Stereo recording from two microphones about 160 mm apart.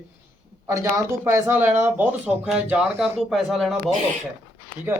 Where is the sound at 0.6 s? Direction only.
20° right (ahead or behind); by 3.7 s centre (ahead or behind).